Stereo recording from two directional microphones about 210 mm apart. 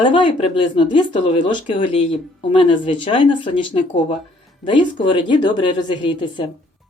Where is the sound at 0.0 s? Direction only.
25° left (ahead or behind).